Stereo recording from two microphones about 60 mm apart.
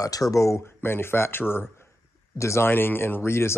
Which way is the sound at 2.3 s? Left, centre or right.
Left.